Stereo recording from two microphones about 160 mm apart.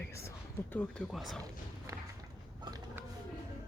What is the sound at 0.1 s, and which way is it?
Speech, 15° left (ahead or behind).